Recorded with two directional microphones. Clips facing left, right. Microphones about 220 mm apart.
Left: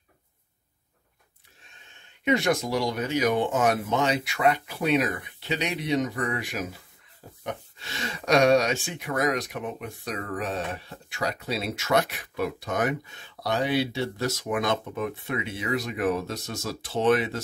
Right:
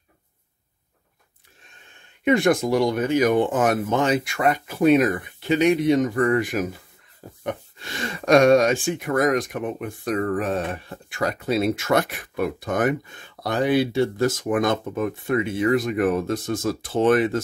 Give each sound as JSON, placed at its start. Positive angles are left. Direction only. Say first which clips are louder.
{"t": 2.2, "sound": "speech", "louder": "right 5 dB", "side_deg": -50}